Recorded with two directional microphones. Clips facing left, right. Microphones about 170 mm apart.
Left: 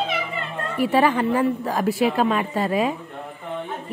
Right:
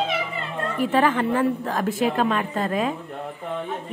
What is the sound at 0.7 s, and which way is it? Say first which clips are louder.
A woman's voice: left 2 dB; 5° left (ahead or behind).